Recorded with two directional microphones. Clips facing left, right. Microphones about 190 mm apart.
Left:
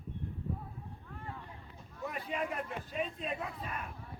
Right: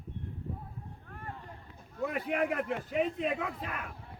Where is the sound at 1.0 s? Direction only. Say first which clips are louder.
Right 1 dB; 55° right (ahead or behind).